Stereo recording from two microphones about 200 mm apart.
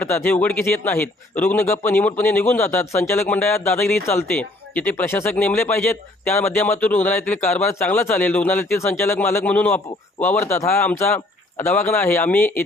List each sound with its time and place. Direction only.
0.0 s speech: 10° left (ahead or behind)